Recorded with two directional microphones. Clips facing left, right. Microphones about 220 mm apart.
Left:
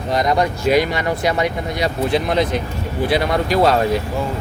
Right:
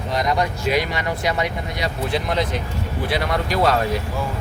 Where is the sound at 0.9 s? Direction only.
45° left (ahead or behind).